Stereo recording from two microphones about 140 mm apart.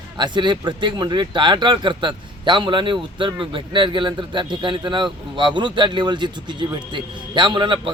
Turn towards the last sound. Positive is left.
turn(degrees=-35)  # may be behind; listen again after turning